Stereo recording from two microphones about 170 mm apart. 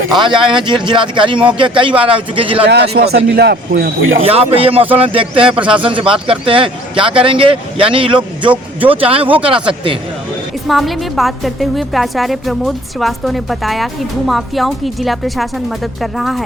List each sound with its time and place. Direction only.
0.2 s speech: 30° right (ahead or behind)
2.6 s speech: 70° right (ahead or behind)
4.2 s speech: 35° right (ahead or behind)
5.5 s speech: 5° right (ahead or behind)
5.8 s speech: 30° right (ahead or behind)
10.7 s a woman's voice: centre (ahead or behind)